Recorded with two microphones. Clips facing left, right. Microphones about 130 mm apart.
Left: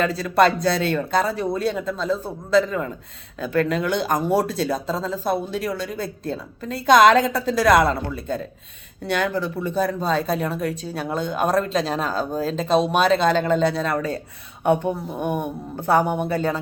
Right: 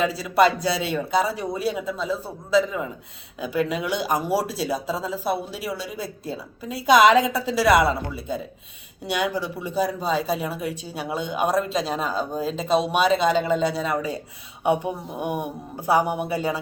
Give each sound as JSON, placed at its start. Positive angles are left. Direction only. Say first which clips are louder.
{"t": 0.0, "sound": "speech", "louder": "left 1 dB", "side_deg": -5}